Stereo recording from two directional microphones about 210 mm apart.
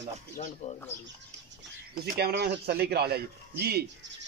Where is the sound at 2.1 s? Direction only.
50° right (ahead or behind).